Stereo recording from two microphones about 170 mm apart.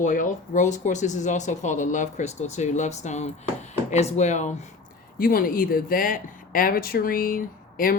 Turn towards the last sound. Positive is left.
turn(degrees=55)  # may be behind; listen again after turning